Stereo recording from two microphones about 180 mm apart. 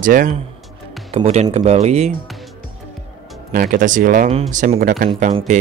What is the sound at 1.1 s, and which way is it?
Speech, 35° right (ahead or behind).